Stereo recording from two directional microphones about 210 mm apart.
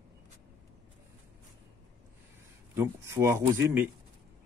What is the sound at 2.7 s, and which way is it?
Speech, 15° right (ahead or behind).